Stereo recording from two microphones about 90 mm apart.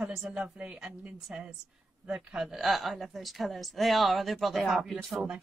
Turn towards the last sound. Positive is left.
turn(degrees=-5)  # may be behind; listen again after turning